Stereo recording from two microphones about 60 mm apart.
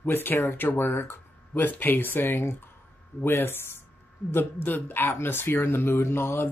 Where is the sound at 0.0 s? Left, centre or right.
Left.